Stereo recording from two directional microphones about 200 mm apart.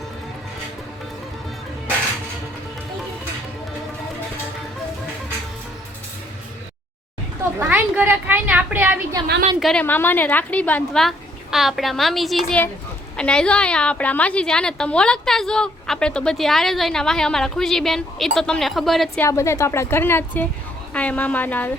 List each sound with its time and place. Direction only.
7.6 s a woman's voice: 5° right (ahead or behind)
9.6 s a woman's voice: 5° left (ahead or behind)
19.2 s a woman's voice: 15° left (ahead or behind)